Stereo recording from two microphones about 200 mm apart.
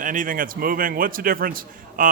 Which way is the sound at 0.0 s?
40° right (ahead or behind).